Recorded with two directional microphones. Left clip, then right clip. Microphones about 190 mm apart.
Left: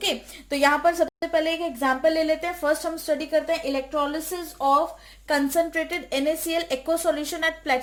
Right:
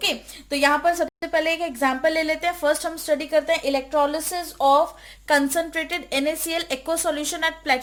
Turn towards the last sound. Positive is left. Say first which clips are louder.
# right 2 dB
turn(degrees=-30)  # may be behind; listen again after turning